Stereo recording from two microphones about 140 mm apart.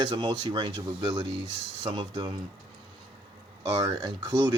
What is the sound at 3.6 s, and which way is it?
Speech, 25° right (ahead or behind).